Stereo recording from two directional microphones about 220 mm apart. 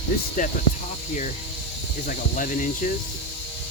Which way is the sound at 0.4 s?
35° left (ahead or behind).